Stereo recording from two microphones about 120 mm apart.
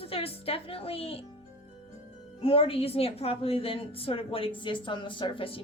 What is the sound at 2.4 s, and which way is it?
A woman's voice, 50° left (ahead or behind).